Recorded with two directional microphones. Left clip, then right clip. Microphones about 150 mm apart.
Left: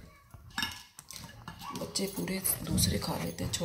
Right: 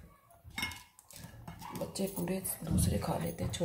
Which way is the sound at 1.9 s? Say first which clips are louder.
Left 3 dB; 15° right (ahead or behind).